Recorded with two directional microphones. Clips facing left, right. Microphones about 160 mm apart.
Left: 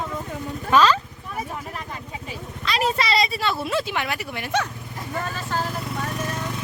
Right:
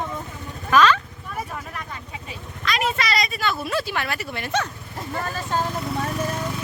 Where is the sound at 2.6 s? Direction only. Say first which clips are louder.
Left 1 dB; 35° left (ahead or behind); by 4.7 s 10° left (ahead or behind).